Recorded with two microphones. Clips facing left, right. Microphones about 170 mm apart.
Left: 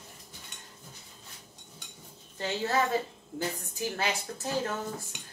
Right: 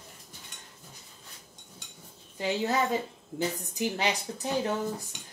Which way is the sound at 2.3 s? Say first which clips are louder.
Right 1 dB; 15° right (ahead or behind).